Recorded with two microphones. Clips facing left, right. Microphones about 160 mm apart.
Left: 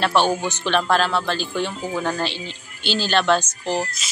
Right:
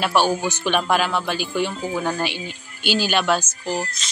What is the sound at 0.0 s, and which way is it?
Speech, 10° right (ahead or behind).